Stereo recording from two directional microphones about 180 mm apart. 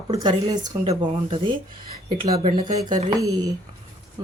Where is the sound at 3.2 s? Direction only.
20° right (ahead or behind).